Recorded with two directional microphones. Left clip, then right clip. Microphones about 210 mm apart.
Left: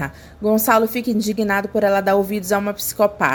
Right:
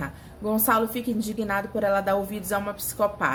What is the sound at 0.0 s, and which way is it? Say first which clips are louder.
A woman's voice: left 9 dB; 35° left (ahead or behind).